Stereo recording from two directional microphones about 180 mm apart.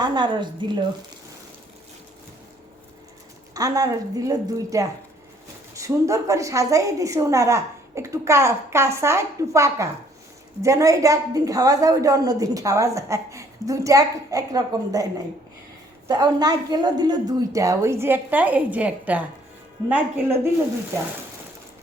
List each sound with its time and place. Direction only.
0.0 s a woman's voice: 25° right (ahead or behind)
3.5 s a woman's voice: 20° right (ahead or behind)
16.0 s a woman's voice: 20° right (ahead or behind)